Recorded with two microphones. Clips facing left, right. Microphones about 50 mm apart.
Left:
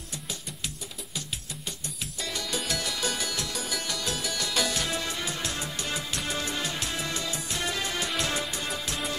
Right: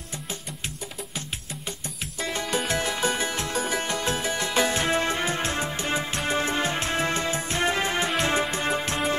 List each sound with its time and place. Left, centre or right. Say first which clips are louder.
2.2 s music: right 6 dB; right